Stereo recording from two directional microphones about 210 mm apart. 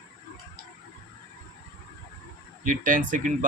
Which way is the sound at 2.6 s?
40° right (ahead or behind).